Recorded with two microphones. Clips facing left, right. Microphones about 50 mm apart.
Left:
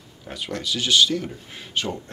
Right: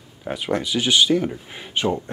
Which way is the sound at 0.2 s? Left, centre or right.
Right.